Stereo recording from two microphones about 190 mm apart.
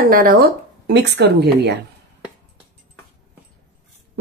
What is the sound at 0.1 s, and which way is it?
Speech, 50° right (ahead or behind).